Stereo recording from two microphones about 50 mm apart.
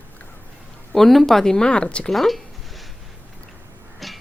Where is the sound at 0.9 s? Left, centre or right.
Centre; by 2.1 s left.